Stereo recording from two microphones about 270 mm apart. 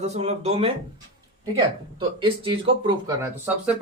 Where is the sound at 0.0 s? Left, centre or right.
Right.